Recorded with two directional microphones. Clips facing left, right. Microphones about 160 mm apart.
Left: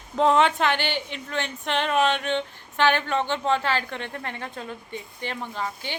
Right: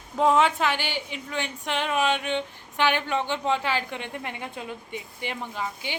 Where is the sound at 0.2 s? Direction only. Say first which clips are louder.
Left 1 dB; 5° right (ahead or behind).